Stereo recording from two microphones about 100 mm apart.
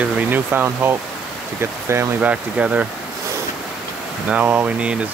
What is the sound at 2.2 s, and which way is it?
Speech, 15° right (ahead or behind).